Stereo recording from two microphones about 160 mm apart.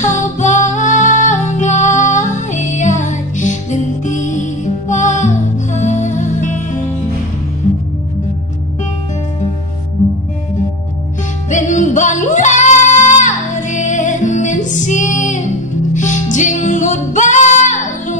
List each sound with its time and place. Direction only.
0.0 s music: 50° left (ahead or behind)
11.5 s music: 50° left (ahead or behind)